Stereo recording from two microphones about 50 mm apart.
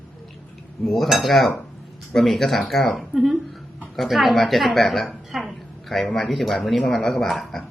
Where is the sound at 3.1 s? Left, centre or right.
Centre.